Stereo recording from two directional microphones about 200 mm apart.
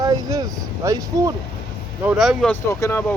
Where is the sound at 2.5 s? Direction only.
15° left (ahead or behind).